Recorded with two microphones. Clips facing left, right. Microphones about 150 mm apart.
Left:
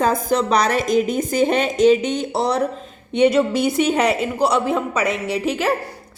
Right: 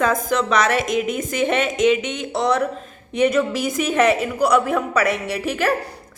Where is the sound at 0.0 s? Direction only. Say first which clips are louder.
Left 1 dB; 35° left (ahead or behind).